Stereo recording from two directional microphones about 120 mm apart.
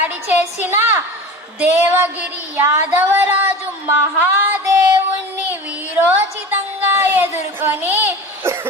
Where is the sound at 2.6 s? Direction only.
15° right (ahead or behind).